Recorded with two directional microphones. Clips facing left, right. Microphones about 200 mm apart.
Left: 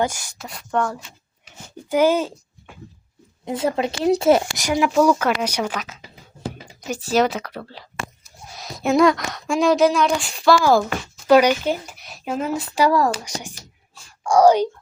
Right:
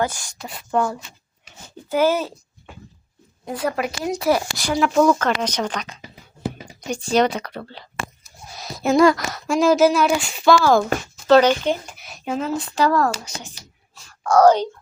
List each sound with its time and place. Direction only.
0.0 s speech: 10° left (ahead or behind)
1.7 s speech: 15° left (ahead or behind)
3.4 s a woman's voice: 25° left (ahead or behind)
4.6 s a woman's voice: 10° left (ahead or behind)